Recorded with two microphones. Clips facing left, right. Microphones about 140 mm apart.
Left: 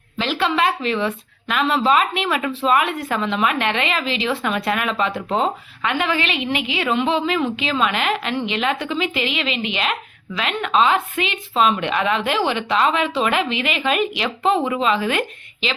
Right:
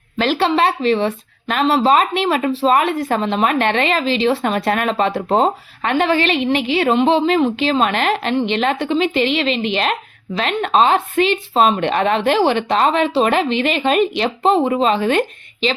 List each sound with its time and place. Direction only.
0.2 s a woman's voice: 35° right (ahead or behind)